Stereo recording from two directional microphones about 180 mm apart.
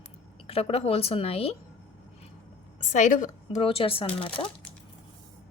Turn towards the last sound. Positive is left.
turn(degrees=30)  # may be behind; listen again after turning